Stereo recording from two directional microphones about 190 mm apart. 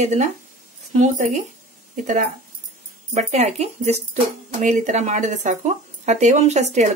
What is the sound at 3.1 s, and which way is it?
Speech, 35° right (ahead or behind).